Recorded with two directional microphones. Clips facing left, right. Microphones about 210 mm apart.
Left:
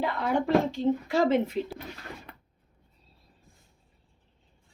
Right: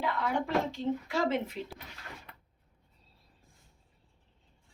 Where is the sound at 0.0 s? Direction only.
35° left (ahead or behind).